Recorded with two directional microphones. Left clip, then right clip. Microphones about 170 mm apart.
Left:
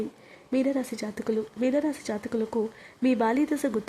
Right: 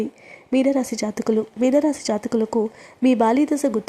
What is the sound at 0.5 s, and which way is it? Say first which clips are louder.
Speech: right 7 dB; 25° right (ahead or behind).